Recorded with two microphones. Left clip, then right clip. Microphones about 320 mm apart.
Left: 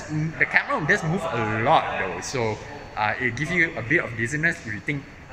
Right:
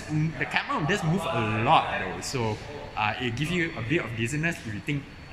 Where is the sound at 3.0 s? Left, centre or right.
Centre.